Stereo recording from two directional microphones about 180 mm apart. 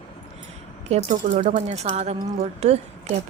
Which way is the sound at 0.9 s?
40° right (ahead or behind).